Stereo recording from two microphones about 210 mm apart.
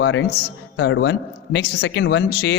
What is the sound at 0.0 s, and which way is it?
A man's voice, 60° left (ahead or behind).